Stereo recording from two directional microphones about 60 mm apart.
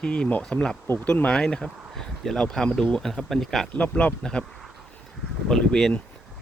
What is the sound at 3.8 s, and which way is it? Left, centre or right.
Speech, left.